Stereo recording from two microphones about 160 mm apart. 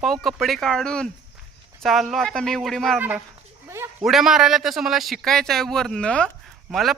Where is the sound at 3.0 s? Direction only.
10° right (ahead or behind).